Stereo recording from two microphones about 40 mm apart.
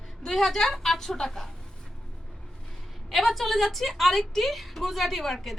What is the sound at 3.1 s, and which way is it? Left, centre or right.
A woman's voice, centre.